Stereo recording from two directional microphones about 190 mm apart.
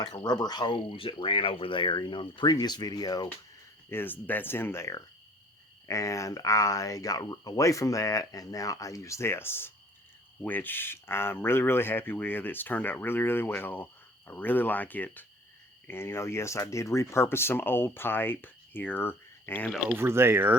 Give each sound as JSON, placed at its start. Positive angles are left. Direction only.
{"t": 0.0, "sound": "speech", "side_deg": 20}
{"t": 19.7, "sound": "speech", "side_deg": -10}